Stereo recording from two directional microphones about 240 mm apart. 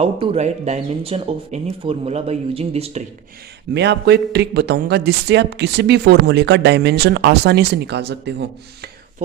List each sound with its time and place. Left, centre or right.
0.0 s speech: right
3.8 s speech: right